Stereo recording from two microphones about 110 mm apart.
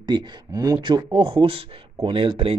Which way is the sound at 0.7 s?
45° right (ahead or behind).